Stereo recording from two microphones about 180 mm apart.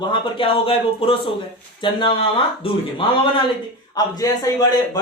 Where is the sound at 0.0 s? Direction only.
30° left (ahead or behind).